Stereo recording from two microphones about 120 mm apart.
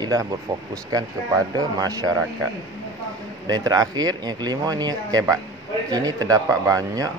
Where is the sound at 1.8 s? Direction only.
30° right (ahead or behind).